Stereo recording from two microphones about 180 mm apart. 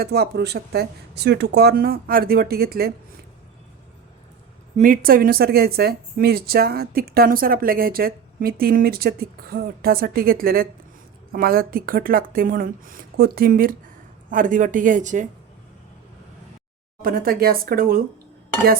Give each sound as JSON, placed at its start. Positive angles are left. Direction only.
{"t": 0.0, "sound": "a woman's voice", "side_deg": -65}
{"t": 4.8, "sound": "a woman's voice", "side_deg": -50}
{"t": 17.0, "sound": "a woman's voice", "side_deg": -55}